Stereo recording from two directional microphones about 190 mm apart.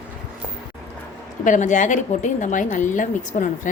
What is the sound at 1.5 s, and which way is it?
A woman's voice, 40° left (ahead or behind).